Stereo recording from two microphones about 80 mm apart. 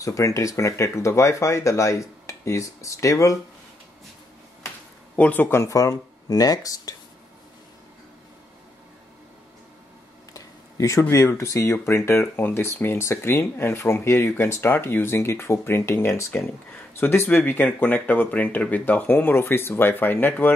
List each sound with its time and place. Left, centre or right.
0.0 s speech: left
5.1 s speech: centre
5.5 s speech: left
10.3 s speech: left